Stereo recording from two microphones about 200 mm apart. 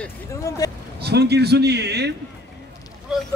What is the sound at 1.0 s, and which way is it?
A man's voice, 55° right (ahead or behind).